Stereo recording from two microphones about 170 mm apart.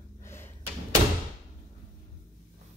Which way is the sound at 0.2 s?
15° left (ahead or behind).